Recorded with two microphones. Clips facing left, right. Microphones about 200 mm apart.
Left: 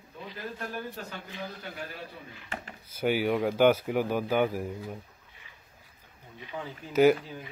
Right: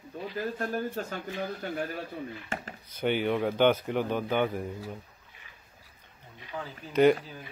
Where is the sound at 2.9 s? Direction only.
5° left (ahead or behind).